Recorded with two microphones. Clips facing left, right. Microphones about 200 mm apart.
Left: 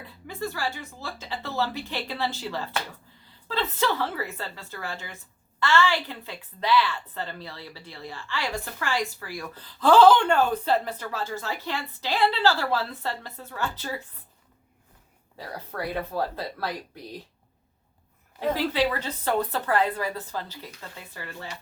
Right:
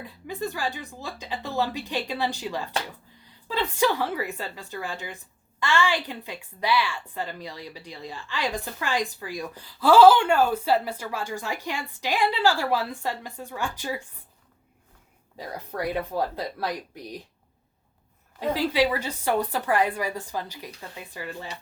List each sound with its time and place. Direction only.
0.3 s a woman's voice: 15° right (ahead or behind)
15.4 s a woman's voice: 15° right (ahead or behind)
18.3 s a woman's voice: 15° right (ahead or behind)